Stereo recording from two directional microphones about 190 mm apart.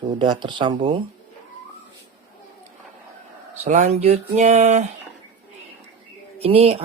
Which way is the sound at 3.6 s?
40° right (ahead or behind).